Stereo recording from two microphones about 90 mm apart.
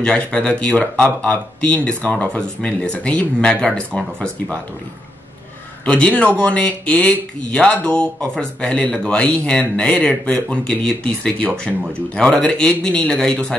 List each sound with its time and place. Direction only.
0.0 s speech: 10° left (ahead or behind)
5.9 s speech: 15° left (ahead or behind)